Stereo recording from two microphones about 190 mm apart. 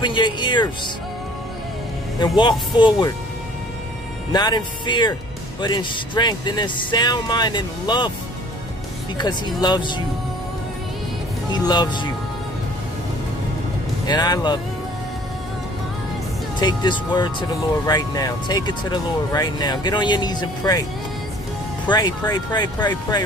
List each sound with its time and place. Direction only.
0.0 s speech: 25° left (ahead or behind)
2.1 s speech: 25° left (ahead or behind)
4.3 s speech: 20° left (ahead or behind)
9.6 s speech: 25° left (ahead or behind)
11.5 s speech: 20° left (ahead or behind)
14.0 s speech: 20° left (ahead or behind)
16.5 s speech: 25° left (ahead or behind)
21.8 s speech: 20° left (ahead or behind)